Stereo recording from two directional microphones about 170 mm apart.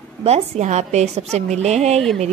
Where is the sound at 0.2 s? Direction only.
40° right (ahead or behind).